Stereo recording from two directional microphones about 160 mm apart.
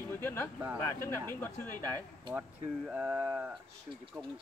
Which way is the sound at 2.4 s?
10° right (ahead or behind).